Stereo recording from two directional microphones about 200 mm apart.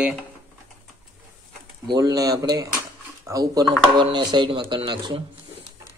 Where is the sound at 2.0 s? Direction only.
20° right (ahead or behind).